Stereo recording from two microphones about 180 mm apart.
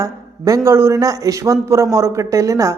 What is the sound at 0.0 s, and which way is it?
A man's voice, 15° right (ahead or behind).